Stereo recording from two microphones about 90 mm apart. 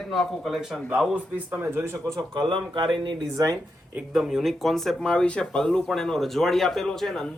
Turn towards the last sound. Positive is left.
turn(degrees=5)  # may be behind; listen again after turning